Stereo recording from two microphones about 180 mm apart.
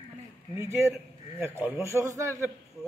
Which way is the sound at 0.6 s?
15° right (ahead or behind).